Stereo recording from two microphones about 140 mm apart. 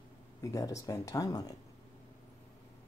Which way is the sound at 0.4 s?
25° left (ahead or behind).